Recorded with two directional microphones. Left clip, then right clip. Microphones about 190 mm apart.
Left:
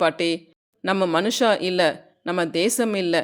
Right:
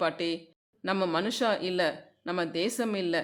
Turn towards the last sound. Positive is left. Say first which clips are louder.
# left 8 dB
turn(degrees=30)  # may be behind; listen again after turning